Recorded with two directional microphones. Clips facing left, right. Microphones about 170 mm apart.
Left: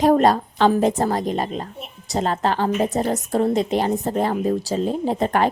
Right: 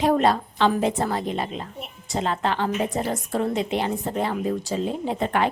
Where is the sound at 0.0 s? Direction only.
40° left (ahead or behind).